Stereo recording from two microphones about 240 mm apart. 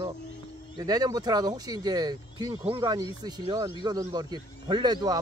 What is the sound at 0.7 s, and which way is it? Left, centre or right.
Speech, centre.